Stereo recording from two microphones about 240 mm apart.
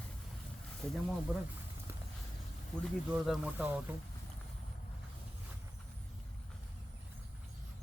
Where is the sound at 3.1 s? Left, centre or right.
Centre.